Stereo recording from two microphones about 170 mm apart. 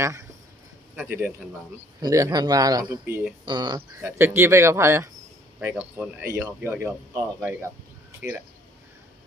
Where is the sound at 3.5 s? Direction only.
25° right (ahead or behind).